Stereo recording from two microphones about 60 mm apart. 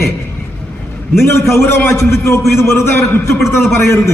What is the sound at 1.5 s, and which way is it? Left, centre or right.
Speech, left.